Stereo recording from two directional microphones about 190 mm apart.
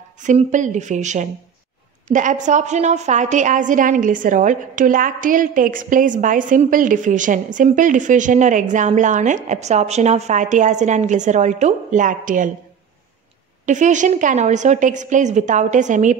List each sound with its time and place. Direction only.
0.2 s a woman's voice: 40° right (ahead or behind)
13.7 s a woman's voice: 40° right (ahead or behind)